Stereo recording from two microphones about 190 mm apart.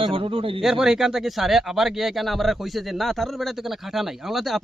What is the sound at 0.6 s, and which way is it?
Speech, centre (ahead or behind).